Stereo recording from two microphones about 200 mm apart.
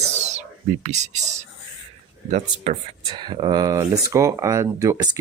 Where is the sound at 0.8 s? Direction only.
35° right (ahead or behind).